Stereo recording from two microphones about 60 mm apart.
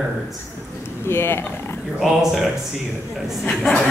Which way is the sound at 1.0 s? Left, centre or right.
Left.